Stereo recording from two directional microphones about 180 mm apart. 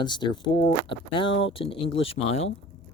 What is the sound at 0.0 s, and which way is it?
Speech, 25° left (ahead or behind).